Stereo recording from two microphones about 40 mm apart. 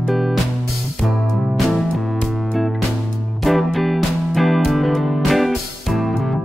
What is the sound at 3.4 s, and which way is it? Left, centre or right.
Music, centre.